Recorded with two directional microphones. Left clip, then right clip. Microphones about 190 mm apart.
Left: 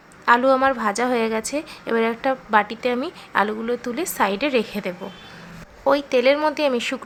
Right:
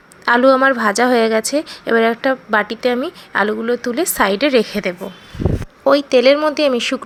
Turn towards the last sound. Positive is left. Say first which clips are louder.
# right 6 dB
turn(degrees=-20)  # may be behind; listen again after turning